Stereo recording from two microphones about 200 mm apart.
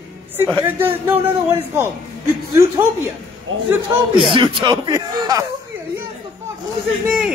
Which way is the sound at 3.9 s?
25° right (ahead or behind).